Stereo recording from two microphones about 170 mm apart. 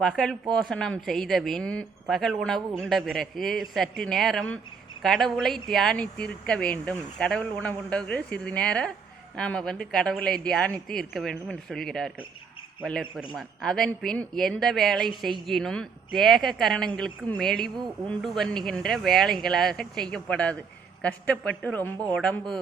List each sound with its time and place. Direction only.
0.0 s a man's voice: 5° left (ahead or behind)